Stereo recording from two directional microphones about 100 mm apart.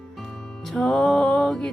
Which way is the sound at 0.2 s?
Centre (ahead or behind).